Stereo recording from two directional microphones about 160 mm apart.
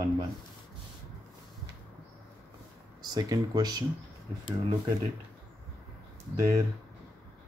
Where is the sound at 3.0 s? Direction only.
25° right (ahead or behind).